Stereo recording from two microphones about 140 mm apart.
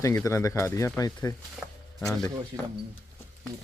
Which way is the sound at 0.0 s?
20° left (ahead or behind).